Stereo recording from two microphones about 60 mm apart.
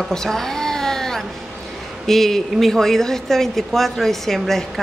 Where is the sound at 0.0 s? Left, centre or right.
Centre.